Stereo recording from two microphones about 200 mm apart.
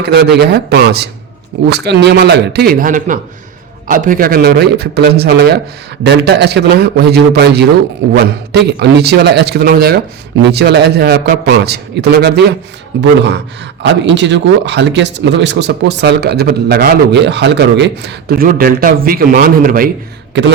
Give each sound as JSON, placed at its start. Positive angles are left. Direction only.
{"t": 0.0, "sound": "speech", "side_deg": -55}